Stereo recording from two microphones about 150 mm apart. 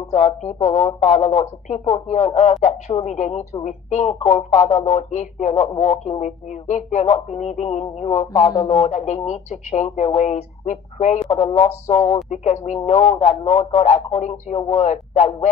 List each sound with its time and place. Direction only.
0.0 s speech: 50° left (ahead or behind)